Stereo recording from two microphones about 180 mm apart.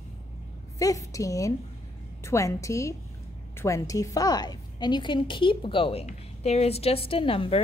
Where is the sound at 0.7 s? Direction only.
20° left (ahead or behind).